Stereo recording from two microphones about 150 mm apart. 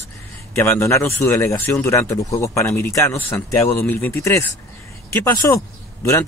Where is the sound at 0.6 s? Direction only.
15° left (ahead or behind).